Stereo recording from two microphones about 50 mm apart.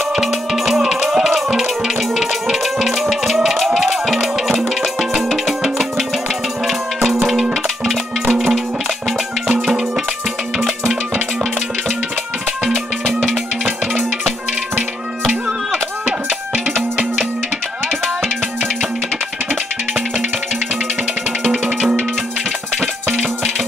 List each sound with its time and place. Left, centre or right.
0.1 s music: centre
10.6 s music: centre
15.7 s music: right
22.8 s music: right